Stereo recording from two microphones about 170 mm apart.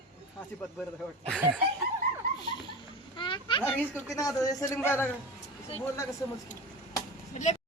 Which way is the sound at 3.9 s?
20° left (ahead or behind).